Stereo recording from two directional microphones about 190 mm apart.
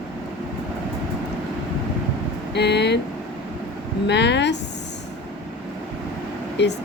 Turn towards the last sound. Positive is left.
turn(degrees=65)  # may be behind; listen again after turning